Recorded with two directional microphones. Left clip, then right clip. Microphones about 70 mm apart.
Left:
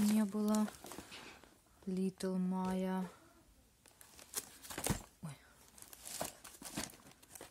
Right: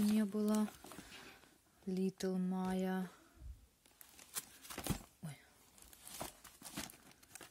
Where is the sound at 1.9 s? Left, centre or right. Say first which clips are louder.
Even; right.